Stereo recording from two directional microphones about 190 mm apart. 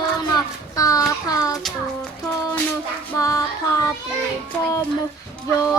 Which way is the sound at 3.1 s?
15° left (ahead or behind).